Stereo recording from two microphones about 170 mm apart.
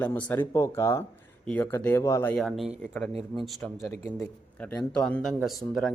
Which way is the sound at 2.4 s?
Centre (ahead or behind).